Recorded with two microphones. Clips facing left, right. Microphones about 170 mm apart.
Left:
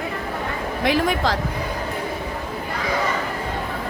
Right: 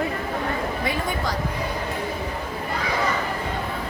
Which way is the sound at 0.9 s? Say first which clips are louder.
Left 10 dB; 90° left.